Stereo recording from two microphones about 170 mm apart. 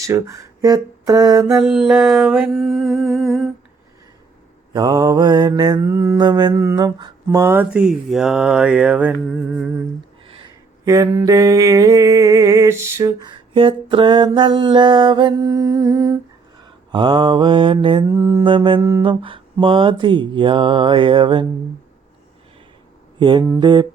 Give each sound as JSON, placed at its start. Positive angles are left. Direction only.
{"t": 0.0, "sound": "speech", "side_deg": -20}
{"t": 1.5, "sound": "a sound", "side_deg": 0}
{"t": 4.7, "sound": "mantra", "side_deg": -20}
{"t": 10.2, "sound": "a sound", "side_deg": -30}
{"t": 10.8, "sound": "mantra", "side_deg": -20}
{"t": 18.0, "sound": "mantra", "side_deg": -15}
{"t": 18.4, "sound": "mantra", "side_deg": -30}
{"t": 18.8, "sound": "mantra", "side_deg": -15}
{"t": 19.0, "sound": "mantra", "side_deg": -30}
{"t": 23.6, "sound": "mantra", "side_deg": -25}